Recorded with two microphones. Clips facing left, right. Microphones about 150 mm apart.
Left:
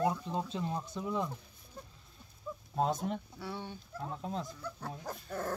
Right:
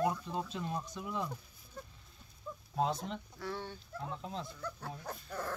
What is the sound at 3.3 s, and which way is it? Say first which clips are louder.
Speech: even; 10° left (ahead or behind).